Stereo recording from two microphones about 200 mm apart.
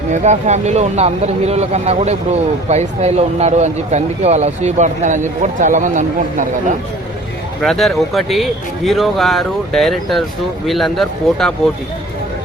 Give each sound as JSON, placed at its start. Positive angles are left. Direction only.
{"t": 0.1, "sound": "speech", "side_deg": -35}
{"t": 7.6, "sound": "speech", "side_deg": 0}